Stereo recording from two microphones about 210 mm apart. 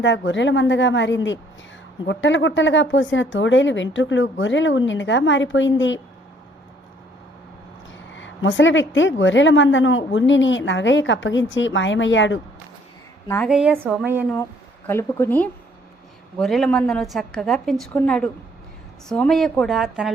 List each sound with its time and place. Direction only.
0.0 s a woman's voice: 60° left (ahead or behind)
8.1 s a woman's voice: 65° left (ahead or behind)
13.2 s a woman's voice: 10° left (ahead or behind)
13.5 s a woman's voice: 5° right (ahead or behind)
14.8 s a woman's voice: 10° left (ahead or behind)